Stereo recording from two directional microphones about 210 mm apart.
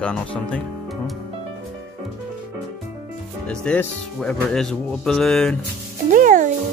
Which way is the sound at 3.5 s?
5° left (ahead or behind).